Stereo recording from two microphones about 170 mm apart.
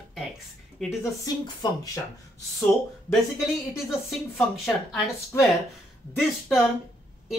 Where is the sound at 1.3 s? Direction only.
20° left (ahead or behind).